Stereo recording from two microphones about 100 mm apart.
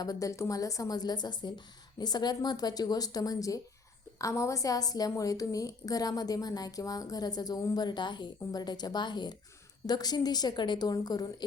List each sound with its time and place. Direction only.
0.0 s a woman's voice: 35° left (ahead or behind)